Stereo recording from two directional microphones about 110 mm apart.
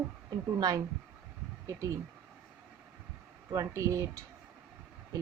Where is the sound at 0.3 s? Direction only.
35° right (ahead or behind).